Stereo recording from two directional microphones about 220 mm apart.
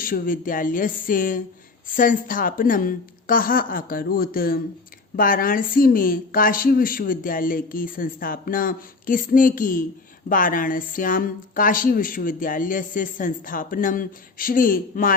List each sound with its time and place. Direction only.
0.0 s a woman's voice: 40° left (ahead or behind)